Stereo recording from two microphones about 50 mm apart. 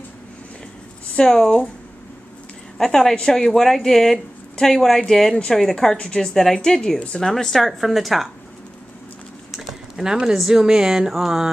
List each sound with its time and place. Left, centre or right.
1.1 s speech: centre
2.8 s speech: centre
5.3 s speech: centre
5.6 s a woman's voice: centre
9.5 s a sound: centre
10.4 s a woman's voice: centre